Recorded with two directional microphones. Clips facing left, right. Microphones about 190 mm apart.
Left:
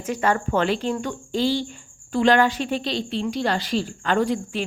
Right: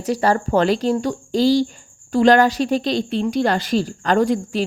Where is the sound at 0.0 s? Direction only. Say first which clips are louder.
Right 4 dB; 35° right (ahead or behind).